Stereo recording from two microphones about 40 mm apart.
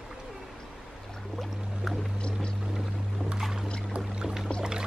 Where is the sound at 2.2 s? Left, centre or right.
Left.